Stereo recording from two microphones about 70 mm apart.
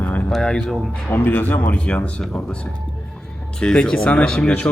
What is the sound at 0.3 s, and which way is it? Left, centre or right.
Speech, centre.